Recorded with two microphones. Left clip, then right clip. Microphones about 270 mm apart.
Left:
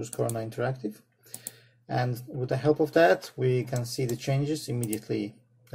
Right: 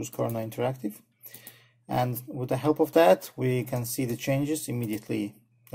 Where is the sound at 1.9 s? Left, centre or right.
Right.